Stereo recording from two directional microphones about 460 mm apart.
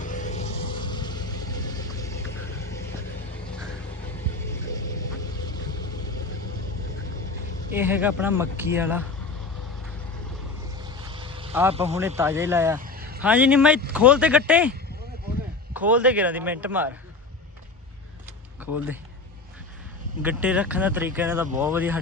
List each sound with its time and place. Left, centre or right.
0.0 s a sound: centre
7.7 s speech: centre
10.8 s speech: centre
12.8 s vehicle: centre
13.2 s speech: centre
15.7 s speech: centre
18.6 s speech: centre
20.2 s speech: centre